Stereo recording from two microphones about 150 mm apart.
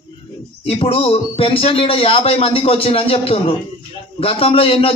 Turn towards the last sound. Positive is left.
turn(degrees=40)  # may be behind; listen again after turning